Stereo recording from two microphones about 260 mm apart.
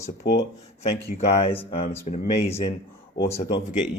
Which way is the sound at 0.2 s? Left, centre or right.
Left.